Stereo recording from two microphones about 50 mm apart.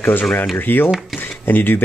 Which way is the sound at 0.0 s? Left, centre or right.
Left.